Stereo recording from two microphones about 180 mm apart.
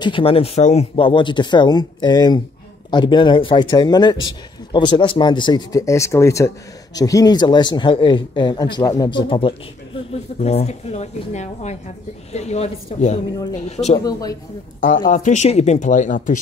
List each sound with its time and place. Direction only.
0.0 s a woman's voice: 30° left (ahead or behind)
13.9 s speech: 20° left (ahead or behind)
15.0 s speech: 40° left (ahead or behind)